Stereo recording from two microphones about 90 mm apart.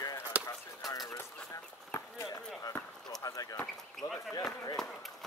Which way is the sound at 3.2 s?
45° left (ahead or behind).